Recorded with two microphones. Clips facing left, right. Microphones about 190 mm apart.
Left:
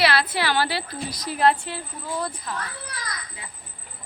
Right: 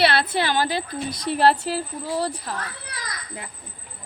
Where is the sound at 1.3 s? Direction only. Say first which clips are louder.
Right 2 dB; 35° right (ahead or behind).